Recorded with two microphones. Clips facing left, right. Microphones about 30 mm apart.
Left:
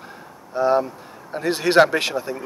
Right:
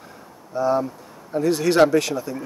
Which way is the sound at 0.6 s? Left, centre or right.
Left.